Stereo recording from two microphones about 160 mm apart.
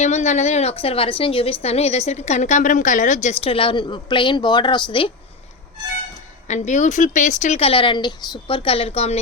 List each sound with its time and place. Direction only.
0.0 s a woman's voice: 45° left (ahead or behind)
6.5 s a woman's voice: 45° left (ahead or behind)